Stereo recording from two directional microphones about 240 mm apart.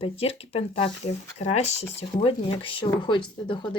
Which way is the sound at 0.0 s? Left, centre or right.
Left.